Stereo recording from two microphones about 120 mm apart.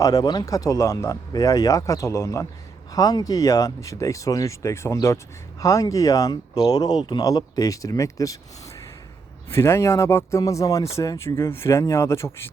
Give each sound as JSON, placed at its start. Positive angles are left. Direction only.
{"t": 0.0, "sound": "speech", "side_deg": 30}
{"t": 9.5, "sound": "speech", "side_deg": 20}